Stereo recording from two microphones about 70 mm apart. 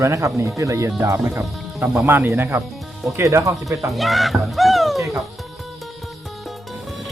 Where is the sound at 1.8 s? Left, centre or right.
Right.